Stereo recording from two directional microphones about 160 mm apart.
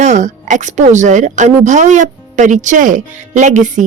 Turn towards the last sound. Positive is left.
turn(degrees=-50)  # may be behind; listen again after turning